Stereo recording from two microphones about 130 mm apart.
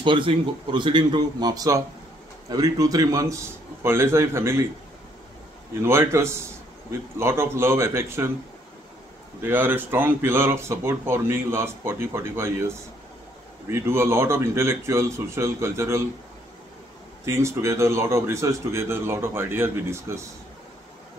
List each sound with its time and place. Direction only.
0.0 s speech: 40° right (ahead or behind); by 4.6 s 20° right (ahead or behind)
5.8 s speech: 20° right (ahead or behind)
9.4 s speech: 15° right (ahead or behind)
17.2 s speech: 20° right (ahead or behind)